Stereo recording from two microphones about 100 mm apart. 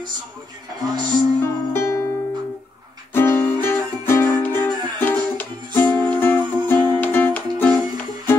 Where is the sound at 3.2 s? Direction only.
20° left (ahead or behind).